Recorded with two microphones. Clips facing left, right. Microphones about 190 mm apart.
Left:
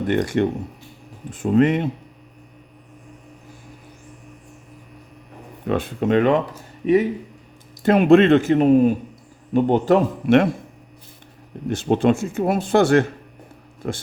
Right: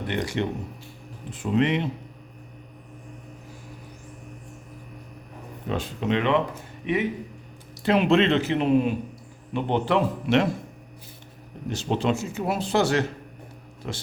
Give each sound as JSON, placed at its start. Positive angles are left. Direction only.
{"t": 0.1, "sound": "speech", "side_deg": 50}
{"t": 5.6, "sound": "speech", "side_deg": 55}
{"t": 11.7, "sound": "speech", "side_deg": 55}